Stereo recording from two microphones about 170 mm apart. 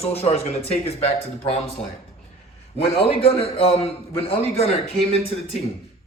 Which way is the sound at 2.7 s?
35° left (ahead or behind).